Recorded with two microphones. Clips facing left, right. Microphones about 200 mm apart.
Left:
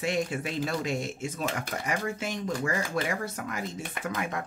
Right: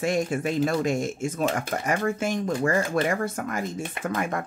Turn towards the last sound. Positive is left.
turn(degrees=-50)  # may be behind; listen again after turning